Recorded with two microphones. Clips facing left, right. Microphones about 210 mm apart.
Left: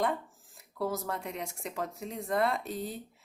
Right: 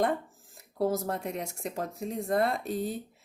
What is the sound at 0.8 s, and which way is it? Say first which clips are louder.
Speech: right 5 dB; 45° right (ahead or behind).